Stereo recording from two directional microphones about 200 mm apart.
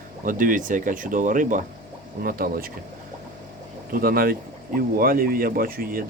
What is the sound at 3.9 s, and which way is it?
Speech, 45° right (ahead or behind).